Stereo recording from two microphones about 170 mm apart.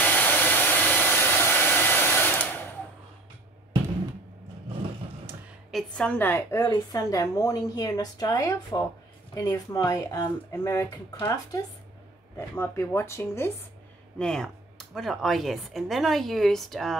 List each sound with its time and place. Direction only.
0.0 s hair dryer: 10° left (ahead or behind)
5.7 s a woman's voice: 5° left (ahead or behind)
14.1 s speech: 5° left (ahead or behind)